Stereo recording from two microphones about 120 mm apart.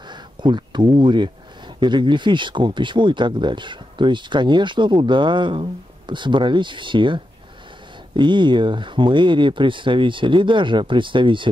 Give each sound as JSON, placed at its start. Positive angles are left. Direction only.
{"t": 0.1, "sound": "speech", "side_deg": -40}
{"t": 8.2, "sound": "speech", "side_deg": -40}